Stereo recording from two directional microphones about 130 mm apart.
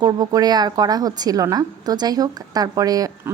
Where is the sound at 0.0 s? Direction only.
30° right (ahead or behind).